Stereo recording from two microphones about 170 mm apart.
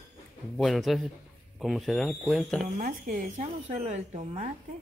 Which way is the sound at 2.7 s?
55° right (ahead or behind).